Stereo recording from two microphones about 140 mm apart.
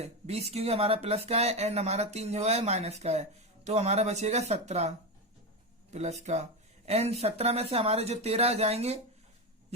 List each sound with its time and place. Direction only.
0.0 s speech: 50° right (ahead or behind)